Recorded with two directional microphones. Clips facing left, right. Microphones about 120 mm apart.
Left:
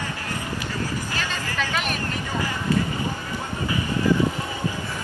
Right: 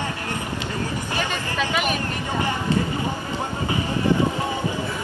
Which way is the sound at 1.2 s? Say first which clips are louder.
Right 5 dB; 15° right (ahead or behind).